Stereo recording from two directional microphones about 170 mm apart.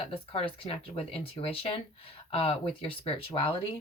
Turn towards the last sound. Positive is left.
turn(degrees=35)  # may be behind; listen again after turning